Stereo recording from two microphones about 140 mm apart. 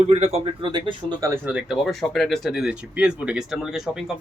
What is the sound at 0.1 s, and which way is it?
Speech, 45° right (ahead or behind).